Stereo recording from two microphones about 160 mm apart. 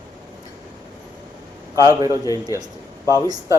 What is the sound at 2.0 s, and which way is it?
Speech, 20° right (ahead or behind).